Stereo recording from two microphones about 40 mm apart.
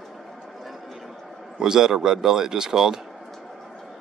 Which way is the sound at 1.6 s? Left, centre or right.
Centre.